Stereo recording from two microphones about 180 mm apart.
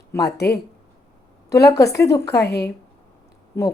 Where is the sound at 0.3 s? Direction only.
65° left (ahead or behind).